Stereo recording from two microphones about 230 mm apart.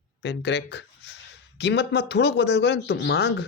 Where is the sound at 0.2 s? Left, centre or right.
Left.